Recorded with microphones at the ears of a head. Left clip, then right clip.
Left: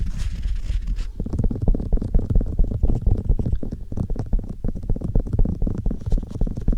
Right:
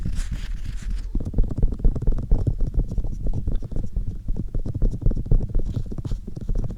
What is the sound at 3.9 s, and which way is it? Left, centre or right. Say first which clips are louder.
Stomach rumble: left 6 dB; left.